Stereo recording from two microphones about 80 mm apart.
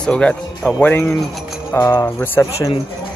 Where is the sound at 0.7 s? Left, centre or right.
Left.